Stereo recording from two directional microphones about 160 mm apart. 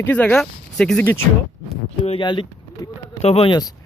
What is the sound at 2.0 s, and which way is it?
Speech, 35° left (ahead or behind).